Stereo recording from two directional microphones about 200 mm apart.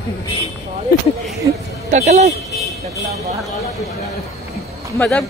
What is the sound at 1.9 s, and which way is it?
Speech, 35° right (ahead or behind).